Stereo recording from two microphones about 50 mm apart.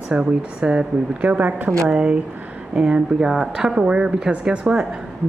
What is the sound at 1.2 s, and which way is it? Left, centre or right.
Speech, right.